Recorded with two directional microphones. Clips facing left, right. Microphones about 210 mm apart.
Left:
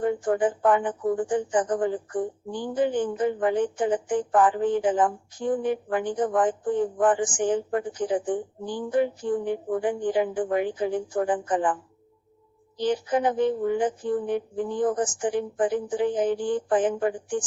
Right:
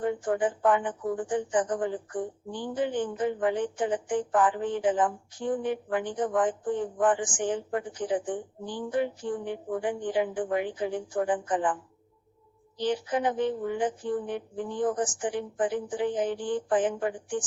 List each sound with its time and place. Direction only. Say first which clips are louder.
0.0 s speech: left 4 dB; 40° left (ahead or behind)